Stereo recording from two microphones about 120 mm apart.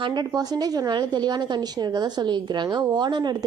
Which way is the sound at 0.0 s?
35° right (ahead or behind).